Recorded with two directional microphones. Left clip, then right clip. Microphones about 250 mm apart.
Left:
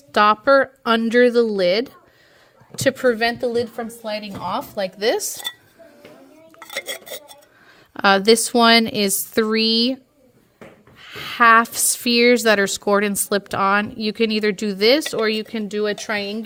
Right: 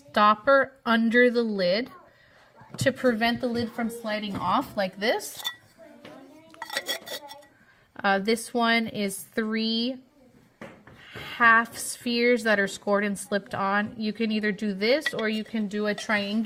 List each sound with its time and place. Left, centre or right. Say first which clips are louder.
0.1 s a woman's voice: left 5 dB; left
6.6 s dishes: left 2 dB; centre
7.9 s a woman's voice: left 10 dB; left
11.0 s a woman's voice: left 6 dB; left